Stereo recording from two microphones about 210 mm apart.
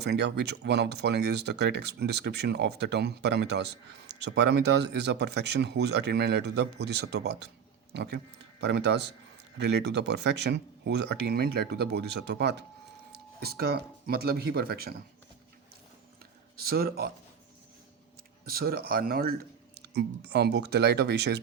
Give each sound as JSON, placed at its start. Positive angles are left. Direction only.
{"t": 0.0, "sound": "speech", "side_deg": -55}
{"t": 16.6, "sound": "speech", "side_deg": -45}
{"t": 18.4, "sound": "speech", "side_deg": -45}